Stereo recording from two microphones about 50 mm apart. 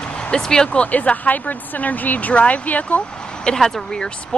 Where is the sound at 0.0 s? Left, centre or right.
Centre.